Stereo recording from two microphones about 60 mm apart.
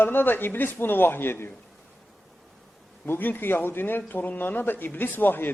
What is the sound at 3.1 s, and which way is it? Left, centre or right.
A man's voice, left.